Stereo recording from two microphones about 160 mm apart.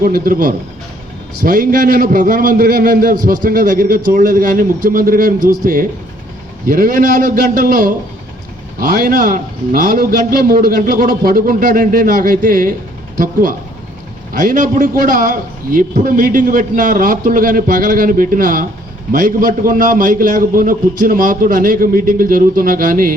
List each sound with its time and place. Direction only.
0.0 s a man's voice: 65° right (ahead or behind)
6.7 s a man's voice: 60° right (ahead or behind)